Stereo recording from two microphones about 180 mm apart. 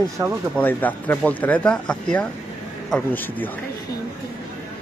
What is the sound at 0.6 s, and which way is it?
Speech, 10° left (ahead or behind).